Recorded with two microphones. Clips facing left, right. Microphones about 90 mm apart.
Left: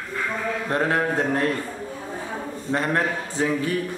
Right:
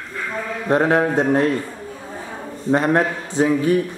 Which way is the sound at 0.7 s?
20° right (ahead or behind).